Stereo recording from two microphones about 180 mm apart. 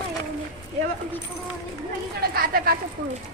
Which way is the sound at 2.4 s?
60° right (ahead or behind).